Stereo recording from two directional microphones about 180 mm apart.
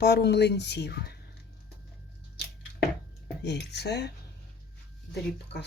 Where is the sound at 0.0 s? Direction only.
65° left (ahead or behind).